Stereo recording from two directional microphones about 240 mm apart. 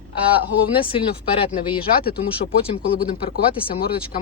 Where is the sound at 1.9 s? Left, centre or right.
Left.